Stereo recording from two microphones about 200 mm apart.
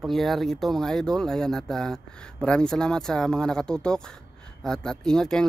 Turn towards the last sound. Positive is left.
turn(degrees=5)  # may be behind; listen again after turning